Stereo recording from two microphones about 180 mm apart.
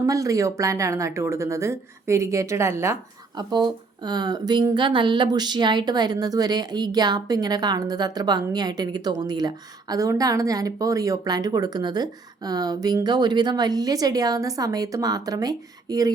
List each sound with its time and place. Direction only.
0.0 s speech: 20° right (ahead or behind)